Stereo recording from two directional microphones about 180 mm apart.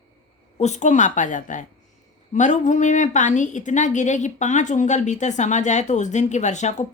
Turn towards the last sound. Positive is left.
turn(degrees=40)  # may be behind; listen again after turning